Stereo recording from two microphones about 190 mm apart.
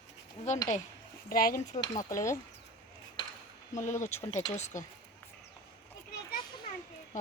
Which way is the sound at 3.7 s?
40° left (ahead or behind).